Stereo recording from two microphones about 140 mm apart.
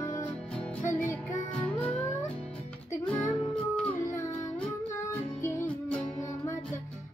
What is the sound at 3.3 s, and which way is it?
Music, 10° left (ahead or behind).